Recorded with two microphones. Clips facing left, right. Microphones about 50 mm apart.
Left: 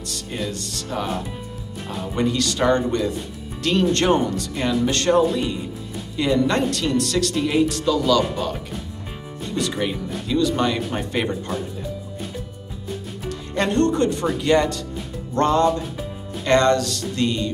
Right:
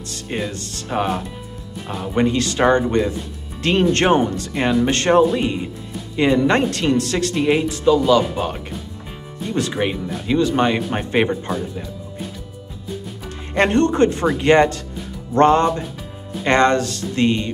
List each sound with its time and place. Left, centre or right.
0.1 s speech: right
2.1 s speech: right
9.7 s speech: right
13.6 s speech: right